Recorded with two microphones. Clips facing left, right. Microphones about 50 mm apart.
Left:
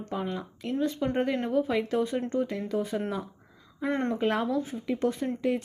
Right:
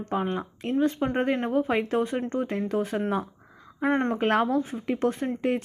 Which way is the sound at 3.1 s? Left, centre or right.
Right.